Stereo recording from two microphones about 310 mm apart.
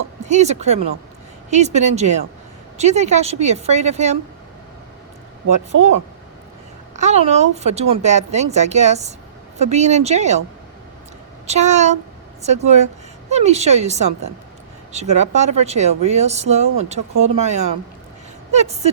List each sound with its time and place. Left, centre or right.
0.3 s speech: right
6.9 s speech: right
11.4 s speech: right